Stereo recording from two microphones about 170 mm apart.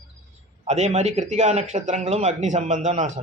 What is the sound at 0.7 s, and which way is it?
A man's voice, 40° right (ahead or behind).